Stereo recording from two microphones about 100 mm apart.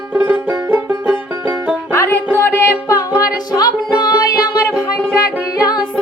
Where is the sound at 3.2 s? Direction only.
35° left (ahead or behind).